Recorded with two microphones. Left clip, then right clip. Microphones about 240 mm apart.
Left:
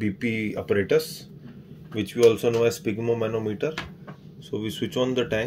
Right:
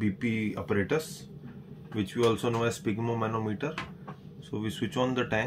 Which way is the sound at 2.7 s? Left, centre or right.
Centre.